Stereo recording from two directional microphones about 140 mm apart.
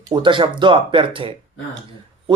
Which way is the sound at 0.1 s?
35° right (ahead or behind).